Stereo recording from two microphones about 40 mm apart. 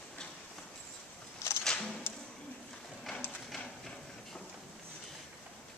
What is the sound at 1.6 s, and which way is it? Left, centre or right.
Music, centre.